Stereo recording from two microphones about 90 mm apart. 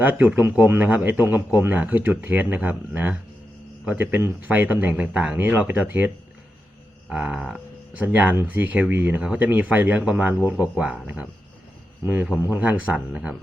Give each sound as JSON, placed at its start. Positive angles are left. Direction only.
{"t": 0.0, "sound": "speech", "side_deg": -15}
{"t": 7.1, "sound": "speech", "side_deg": -10}